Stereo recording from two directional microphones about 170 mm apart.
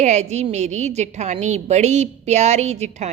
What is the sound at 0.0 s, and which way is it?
A woman's voice, 40° right (ahead or behind).